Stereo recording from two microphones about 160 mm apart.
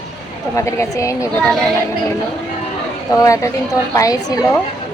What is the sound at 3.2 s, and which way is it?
A woman's voice, 20° left (ahead or behind).